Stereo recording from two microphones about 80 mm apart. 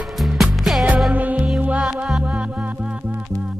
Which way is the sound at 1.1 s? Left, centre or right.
Centre.